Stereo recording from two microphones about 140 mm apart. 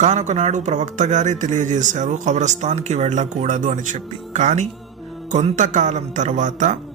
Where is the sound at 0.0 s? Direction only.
55° right (ahead or behind).